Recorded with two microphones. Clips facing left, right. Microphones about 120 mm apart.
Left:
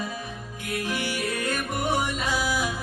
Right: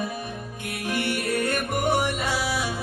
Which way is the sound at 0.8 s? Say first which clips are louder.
Right 4 dB; 60° right (ahead or behind).